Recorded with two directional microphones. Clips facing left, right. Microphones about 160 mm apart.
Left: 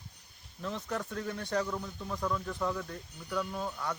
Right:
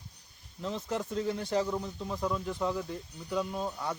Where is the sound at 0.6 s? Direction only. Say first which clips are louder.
Right 2 dB; 25° right (ahead or behind).